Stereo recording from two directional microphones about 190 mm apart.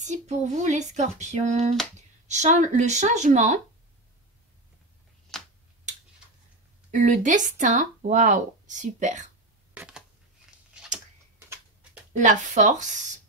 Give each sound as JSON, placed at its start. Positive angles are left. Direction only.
{"t": 0.0, "sound": "speech", "side_deg": -40}
{"t": 5.3, "sound": "tick-tock", "side_deg": 5}
{"t": 7.0, "sound": "speech", "side_deg": -40}
{"t": 9.8, "sound": "a sound", "side_deg": -5}
{"t": 11.4, "sound": "tick-tock", "side_deg": -15}
{"t": 12.1, "sound": "speech", "side_deg": -40}